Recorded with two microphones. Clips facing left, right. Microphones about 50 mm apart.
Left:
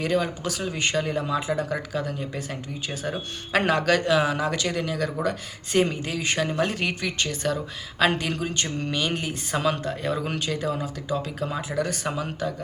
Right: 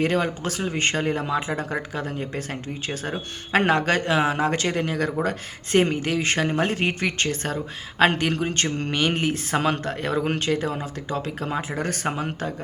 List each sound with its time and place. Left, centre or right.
0.0 s speech: right
7.0 s speech: right